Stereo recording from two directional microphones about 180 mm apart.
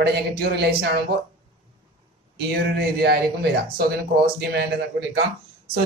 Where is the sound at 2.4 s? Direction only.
65° right (ahead or behind).